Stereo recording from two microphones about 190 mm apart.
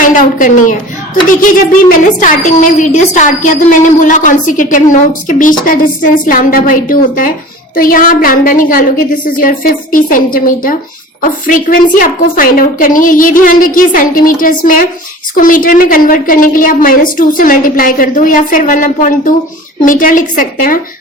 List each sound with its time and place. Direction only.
0.0 s a woman's voice: 45° left (ahead or behind)